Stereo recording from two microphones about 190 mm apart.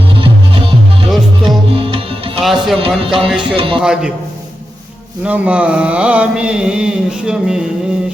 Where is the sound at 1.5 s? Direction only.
25° right (ahead or behind).